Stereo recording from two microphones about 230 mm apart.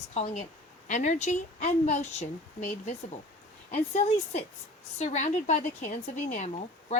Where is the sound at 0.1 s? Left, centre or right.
Left.